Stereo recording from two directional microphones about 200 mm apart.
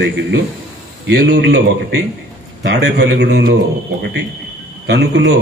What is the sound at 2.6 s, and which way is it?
Speech, 60° right (ahead or behind).